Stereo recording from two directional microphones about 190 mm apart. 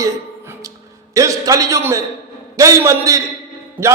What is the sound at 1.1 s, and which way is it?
A man's voice, 15° right (ahead or behind).